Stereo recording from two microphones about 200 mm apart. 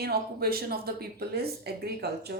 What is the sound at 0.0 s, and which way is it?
A woman's voice, 50° right (ahead or behind).